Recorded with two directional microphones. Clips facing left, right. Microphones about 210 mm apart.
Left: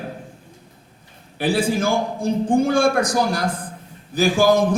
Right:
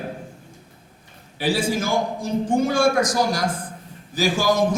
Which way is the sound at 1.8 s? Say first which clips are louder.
Left 3 dB; 60° left (ahead or behind).